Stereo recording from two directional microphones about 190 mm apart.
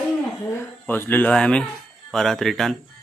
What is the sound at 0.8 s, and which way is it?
Speech, 10° left (ahead or behind).